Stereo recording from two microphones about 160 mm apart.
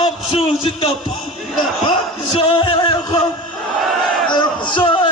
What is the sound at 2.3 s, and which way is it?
Music, 30° left (ahead or behind).